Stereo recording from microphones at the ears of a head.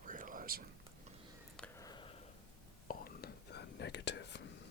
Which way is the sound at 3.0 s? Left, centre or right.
Left.